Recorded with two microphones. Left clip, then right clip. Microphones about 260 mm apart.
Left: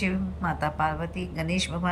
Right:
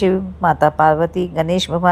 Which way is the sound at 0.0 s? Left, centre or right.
Right.